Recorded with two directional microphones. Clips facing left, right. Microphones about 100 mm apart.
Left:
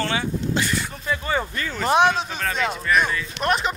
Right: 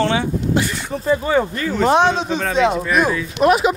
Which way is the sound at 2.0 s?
5° left (ahead or behind).